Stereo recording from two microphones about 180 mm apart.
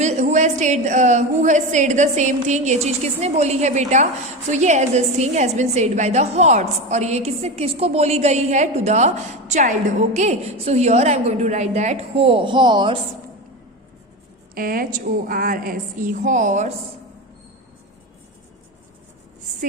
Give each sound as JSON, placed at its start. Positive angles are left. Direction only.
{"t": 0.0, "sound": "a woman's voice", "side_deg": -40}
{"t": 14.5, "sound": "a woman's voice", "side_deg": -50}